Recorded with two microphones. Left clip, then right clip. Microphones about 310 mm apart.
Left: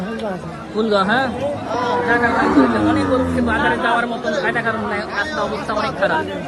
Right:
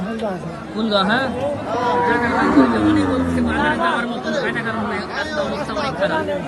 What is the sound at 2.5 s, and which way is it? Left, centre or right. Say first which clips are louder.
Speech: even; centre.